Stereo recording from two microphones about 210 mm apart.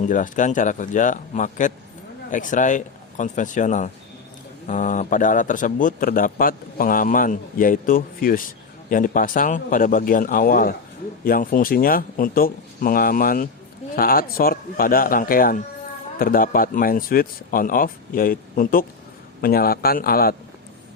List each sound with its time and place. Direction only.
0.0 s a man's voice: 40° left (ahead or behind)